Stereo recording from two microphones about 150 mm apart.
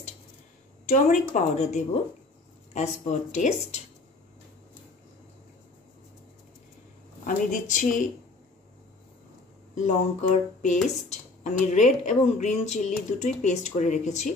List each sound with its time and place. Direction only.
0.8 s speech: 55° left (ahead or behind)
7.2 s a woman's voice: 60° left (ahead or behind)
9.8 s speech: 55° left (ahead or behind)